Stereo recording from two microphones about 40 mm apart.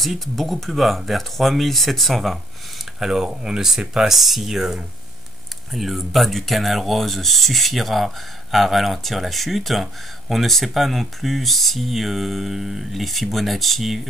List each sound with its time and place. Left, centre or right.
0.0 s speech: centre
2.8 s a sound: centre
3.3 s speech: centre